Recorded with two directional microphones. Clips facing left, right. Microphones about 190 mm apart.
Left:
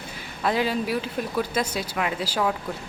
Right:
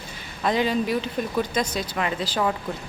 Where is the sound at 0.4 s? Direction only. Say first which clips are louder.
Right 2 dB; 5° left (ahead or behind).